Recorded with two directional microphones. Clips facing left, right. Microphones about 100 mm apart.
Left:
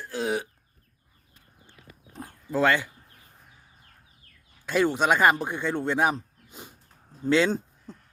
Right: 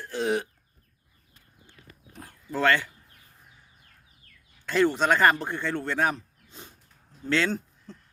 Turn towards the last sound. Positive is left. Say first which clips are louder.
# left 2 dB
turn(degrees=15)  # may be behind; listen again after turning